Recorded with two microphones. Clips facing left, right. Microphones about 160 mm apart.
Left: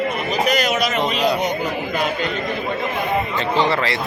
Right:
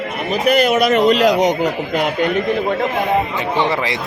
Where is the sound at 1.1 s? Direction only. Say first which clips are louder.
Right 7 dB; 85° right; by 2.3 s 70° right (ahead or behind).